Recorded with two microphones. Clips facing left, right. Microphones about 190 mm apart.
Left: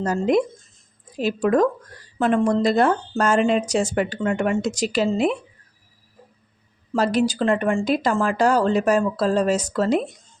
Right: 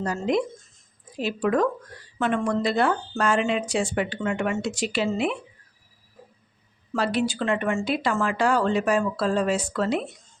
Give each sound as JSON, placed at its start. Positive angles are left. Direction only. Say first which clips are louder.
{"t": 0.0, "sound": "speech", "louder": "left 5 dB", "side_deg": 45}
{"t": 6.9, "sound": "speech", "louder": "left 4 dB", "side_deg": 40}